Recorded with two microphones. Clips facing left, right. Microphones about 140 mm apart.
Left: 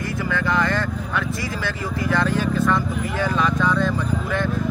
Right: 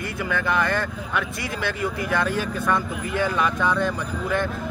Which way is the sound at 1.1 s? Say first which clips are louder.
Left 1 dB; 15° right (ahead or behind).